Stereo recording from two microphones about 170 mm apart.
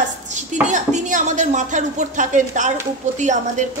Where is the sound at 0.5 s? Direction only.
45° right (ahead or behind).